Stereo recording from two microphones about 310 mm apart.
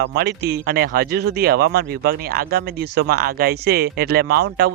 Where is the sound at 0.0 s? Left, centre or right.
Right.